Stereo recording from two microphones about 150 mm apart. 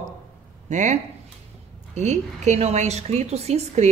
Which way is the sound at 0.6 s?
55° right (ahead or behind).